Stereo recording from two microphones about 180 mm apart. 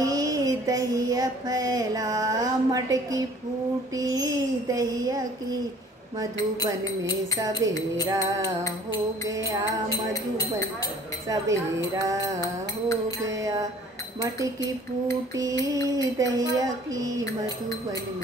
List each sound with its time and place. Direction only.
0.0 s a sound: 20° right (ahead or behind)
3.9 s speech: 20° right (ahead or behind)
8.0 s wind chime: 15° right (ahead or behind)
9.3 s wind chime: 20° right (ahead or behind)
11.2 s wind chime: 15° right (ahead or behind)
12.4 s music: 20° left (ahead or behind)
13.3 s speech: 20° right (ahead or behind)
15.3 s speech: 20° right (ahead or behind)